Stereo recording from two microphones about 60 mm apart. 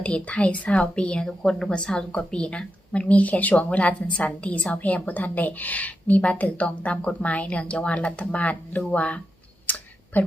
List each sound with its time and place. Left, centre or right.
0.0 s a woman's voice: left
9.6 s clicking: left